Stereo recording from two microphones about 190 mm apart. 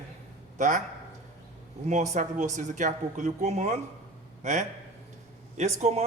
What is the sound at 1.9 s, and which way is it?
A man's voice, 40° right (ahead or behind).